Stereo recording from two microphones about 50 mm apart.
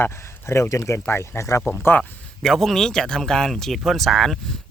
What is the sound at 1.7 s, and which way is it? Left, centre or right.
Speech, left.